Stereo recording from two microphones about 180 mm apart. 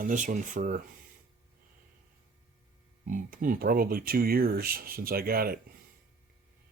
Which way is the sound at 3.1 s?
50° right (ahead or behind).